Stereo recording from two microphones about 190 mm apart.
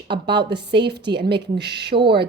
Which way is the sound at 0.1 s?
60° right (ahead or behind).